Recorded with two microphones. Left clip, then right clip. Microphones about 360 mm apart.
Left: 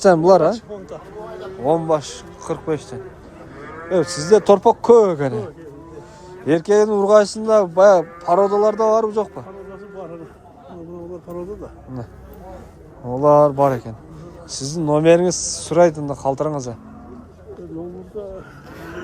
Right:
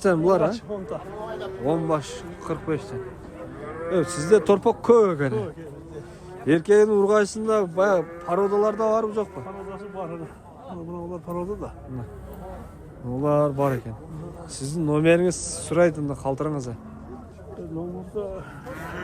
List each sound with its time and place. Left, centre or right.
0.0 s speech: centre
1.6 s speech: centre
9.7 s a sound: right
13.1 s speech: centre